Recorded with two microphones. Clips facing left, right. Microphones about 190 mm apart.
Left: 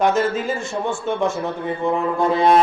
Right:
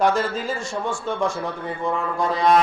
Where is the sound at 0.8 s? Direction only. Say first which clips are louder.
Left 3 dB; 25° left (ahead or behind).